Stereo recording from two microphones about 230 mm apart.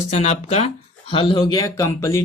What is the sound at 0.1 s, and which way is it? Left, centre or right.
Speech, left.